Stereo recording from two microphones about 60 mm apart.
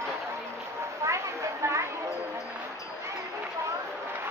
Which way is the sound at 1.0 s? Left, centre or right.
Right.